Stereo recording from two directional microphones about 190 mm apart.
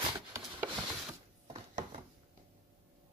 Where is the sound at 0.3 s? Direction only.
15° right (ahead or behind).